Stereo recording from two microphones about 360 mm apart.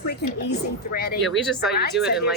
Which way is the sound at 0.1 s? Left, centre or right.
Left.